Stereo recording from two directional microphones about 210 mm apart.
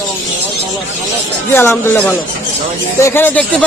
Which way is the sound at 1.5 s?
10° left (ahead or behind).